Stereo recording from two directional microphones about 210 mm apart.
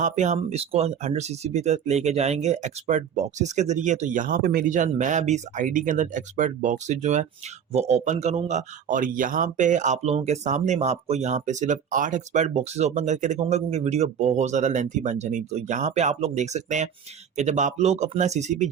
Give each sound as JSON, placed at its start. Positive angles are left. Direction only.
{"t": 0.0, "sound": "a man's voice", "side_deg": -35}